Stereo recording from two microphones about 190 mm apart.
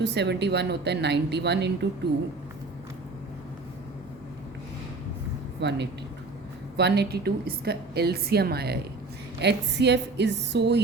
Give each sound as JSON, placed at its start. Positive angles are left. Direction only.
{"t": 0.0, "sound": "a woman's voice", "side_deg": -60}
{"t": 5.5, "sound": "a woman's voice", "side_deg": -65}